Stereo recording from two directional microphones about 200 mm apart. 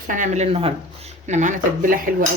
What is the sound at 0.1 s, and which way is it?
Speech, 35° right (ahead or behind).